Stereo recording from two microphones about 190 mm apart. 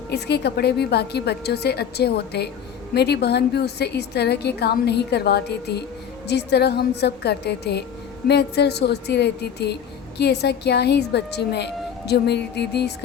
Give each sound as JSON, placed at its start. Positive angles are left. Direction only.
{"t": 0.1, "sound": "a woman's voice", "side_deg": 60}